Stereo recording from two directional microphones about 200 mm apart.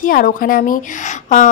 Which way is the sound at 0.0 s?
45° left (ahead or behind).